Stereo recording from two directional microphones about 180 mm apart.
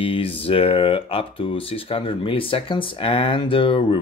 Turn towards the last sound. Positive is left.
turn(degrees=30)  # may be behind; listen again after turning